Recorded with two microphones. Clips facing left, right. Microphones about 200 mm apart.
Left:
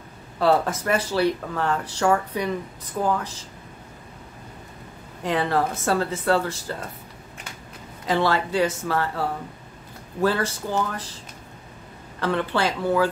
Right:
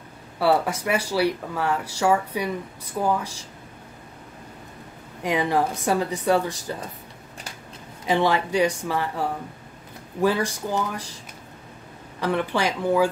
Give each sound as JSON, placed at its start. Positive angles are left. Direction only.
{"t": 0.4, "sound": "speech", "side_deg": -10}
{"t": 5.2, "sound": "speech", "side_deg": -15}
{"t": 8.1, "sound": "speech", "side_deg": -15}
{"t": 12.2, "sound": "speech", "side_deg": -15}